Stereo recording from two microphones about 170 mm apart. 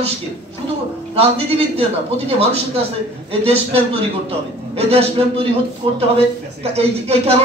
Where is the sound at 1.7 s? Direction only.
35° right (ahead or behind).